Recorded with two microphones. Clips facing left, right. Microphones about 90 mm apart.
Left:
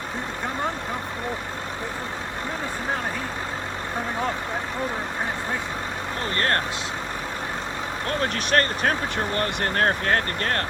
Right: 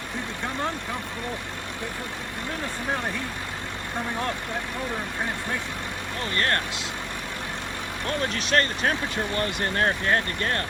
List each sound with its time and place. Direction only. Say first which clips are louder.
6.3 s speech: left 1 dB; 35° left (ahead or behind)
8.5 s speech: left 2 dB; 45° left (ahead or behind)